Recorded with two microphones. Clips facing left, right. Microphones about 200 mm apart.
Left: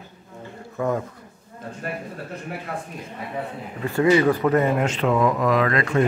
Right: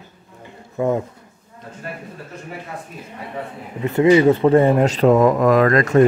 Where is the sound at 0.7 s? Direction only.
20° right (ahead or behind).